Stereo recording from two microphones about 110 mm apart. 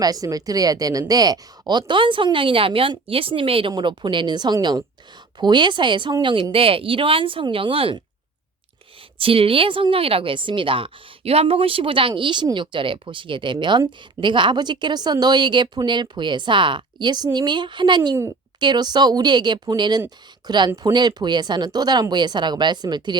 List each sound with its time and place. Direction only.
0.0 s speech: 35° right (ahead or behind)
1.9 s speech: 50° right (ahead or behind)
3.7 s speech: 45° right (ahead or behind)
9.1 s speech: 55° right (ahead or behind); by 23.1 s 40° right (ahead or behind)